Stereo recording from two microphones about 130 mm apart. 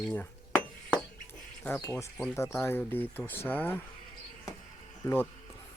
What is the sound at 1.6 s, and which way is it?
Speech, 15° left (ahead or behind).